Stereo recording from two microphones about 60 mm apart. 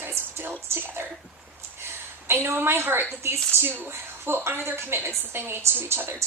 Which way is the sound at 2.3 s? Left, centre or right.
Right.